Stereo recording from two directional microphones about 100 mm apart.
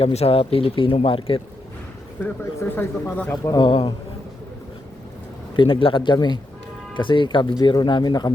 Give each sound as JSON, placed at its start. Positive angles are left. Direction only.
{"t": 0.0, "sound": "speech", "side_deg": 90}
{"t": 2.2, "sound": "speech", "side_deg": 25}
{"t": 3.4, "sound": "speech", "side_deg": 40}
{"t": 5.5, "sound": "speech", "side_deg": 60}